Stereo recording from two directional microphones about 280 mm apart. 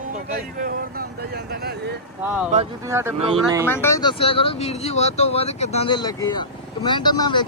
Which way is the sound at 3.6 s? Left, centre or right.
Centre.